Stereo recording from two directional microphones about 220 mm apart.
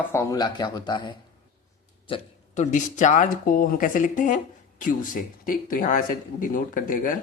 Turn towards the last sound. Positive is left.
turn(degrees=35)  # may be behind; listen again after turning